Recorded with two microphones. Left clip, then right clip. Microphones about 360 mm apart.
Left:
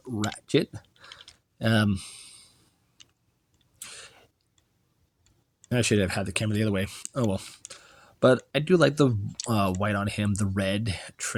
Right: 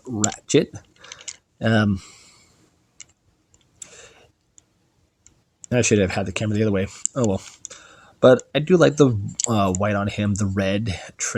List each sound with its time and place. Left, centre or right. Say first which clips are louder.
0.0 s typing: right 6 dB; left
3.8 s chewing: even; left
5.6 s speech: right 6 dB; left